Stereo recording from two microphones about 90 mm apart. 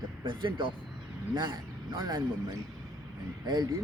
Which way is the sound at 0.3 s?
60° right (ahead or behind).